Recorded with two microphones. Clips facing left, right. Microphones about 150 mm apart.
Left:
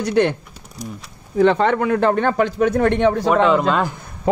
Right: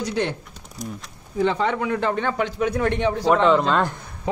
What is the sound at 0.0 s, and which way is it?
Speech, 60° left (ahead or behind).